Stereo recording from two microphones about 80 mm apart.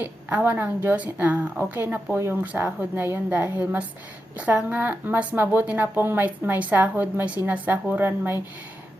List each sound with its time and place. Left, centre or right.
0.0 s speech: right
2.1 s speech: right
2.4 s speech: right